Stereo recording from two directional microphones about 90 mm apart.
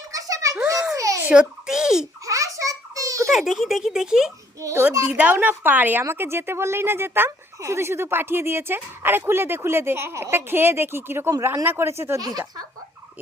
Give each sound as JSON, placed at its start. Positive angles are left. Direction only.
{"t": 0.1, "sound": "a sound", "side_deg": -40}
{"t": 0.9, "sound": "babbling", "side_deg": -35}
{"t": 1.3, "sound": "a child's voice", "side_deg": -10}
{"t": 2.2, "sound": "a sound", "side_deg": -40}
{"t": 3.3, "sound": "speech", "side_deg": 0}
{"t": 4.6, "sound": "a child's voice", "side_deg": -30}
{"t": 5.1, "sound": "a woman's voice", "side_deg": -15}
{"t": 12.2, "sound": "speech", "side_deg": -45}